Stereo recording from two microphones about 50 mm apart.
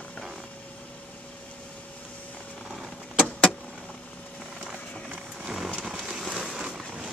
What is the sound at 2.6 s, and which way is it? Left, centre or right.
Vehicle, centre.